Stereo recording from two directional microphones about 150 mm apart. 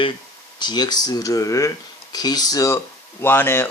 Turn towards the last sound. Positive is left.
turn(degrees=15)  # may be behind; listen again after turning